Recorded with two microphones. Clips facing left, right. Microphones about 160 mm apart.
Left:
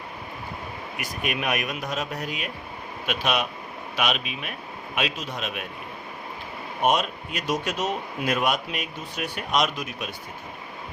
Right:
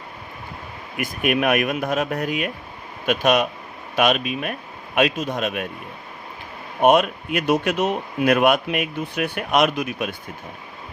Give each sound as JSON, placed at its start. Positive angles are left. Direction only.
{"t": 0.9, "sound": "a man's voice", "side_deg": -55}
{"t": 6.8, "sound": "speech", "side_deg": -60}